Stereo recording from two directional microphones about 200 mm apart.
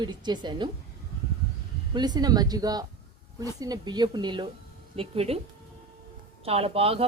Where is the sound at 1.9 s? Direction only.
20° right (ahead or behind).